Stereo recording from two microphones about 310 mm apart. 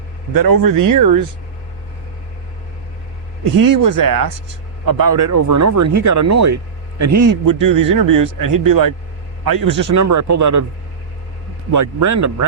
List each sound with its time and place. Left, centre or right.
0.3 s speech: right
3.8 s speech: right
7.0 s speech: right
9.5 s speech: right
11.7 s speech: right